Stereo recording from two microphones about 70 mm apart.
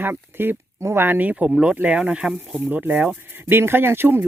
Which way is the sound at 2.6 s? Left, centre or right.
Right.